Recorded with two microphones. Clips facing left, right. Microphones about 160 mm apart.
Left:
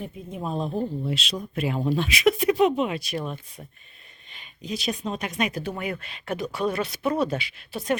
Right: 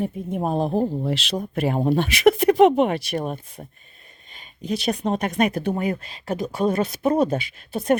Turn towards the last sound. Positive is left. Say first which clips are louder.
# right 5 dB
turn(degrees=-45)  # may be behind; listen again after turning